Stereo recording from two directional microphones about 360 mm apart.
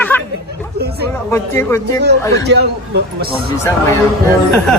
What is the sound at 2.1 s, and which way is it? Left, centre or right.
Speech, right.